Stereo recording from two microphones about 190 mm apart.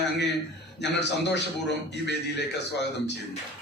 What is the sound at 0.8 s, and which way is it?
A man's voice, 65° left (ahead or behind).